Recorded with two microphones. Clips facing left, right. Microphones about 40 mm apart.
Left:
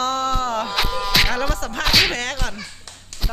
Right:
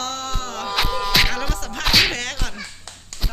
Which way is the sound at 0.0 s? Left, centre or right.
Centre.